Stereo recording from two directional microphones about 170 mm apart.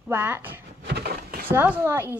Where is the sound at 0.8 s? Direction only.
75° right (ahead or behind).